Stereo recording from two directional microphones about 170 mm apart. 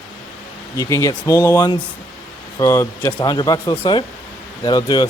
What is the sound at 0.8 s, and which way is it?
Speech, 15° left (ahead or behind).